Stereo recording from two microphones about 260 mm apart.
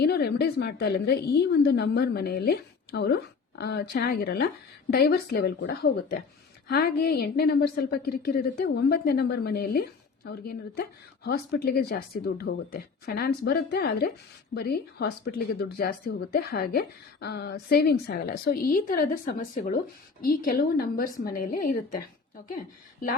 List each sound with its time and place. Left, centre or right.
0.0 s a woman's voice: left